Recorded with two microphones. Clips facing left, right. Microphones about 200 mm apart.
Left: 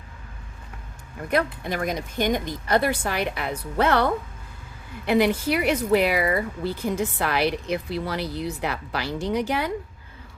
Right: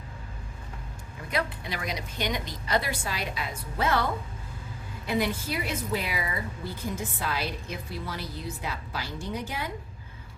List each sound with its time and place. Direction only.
1.3 s a woman's voice: 55° left (ahead or behind); by 9.7 s 75° left (ahead or behind)